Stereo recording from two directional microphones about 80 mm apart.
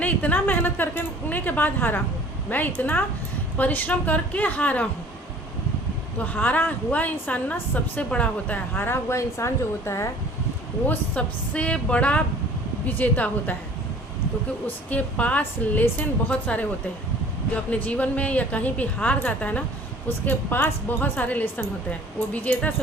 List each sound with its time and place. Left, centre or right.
0.0 s a woman's voice: centre
6.1 s a woman's voice: centre; by 10.1 s left
10.8 s a woman's voice: centre
14.8 s a woman's voice: centre
17.7 s a woman's voice: centre